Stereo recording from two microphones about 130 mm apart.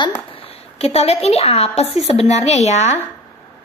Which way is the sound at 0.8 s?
50° left (ahead or behind).